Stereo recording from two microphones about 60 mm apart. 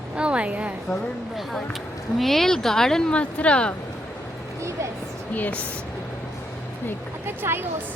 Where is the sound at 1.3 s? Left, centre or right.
Centre.